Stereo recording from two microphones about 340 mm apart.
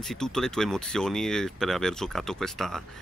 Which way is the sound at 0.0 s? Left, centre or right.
Centre.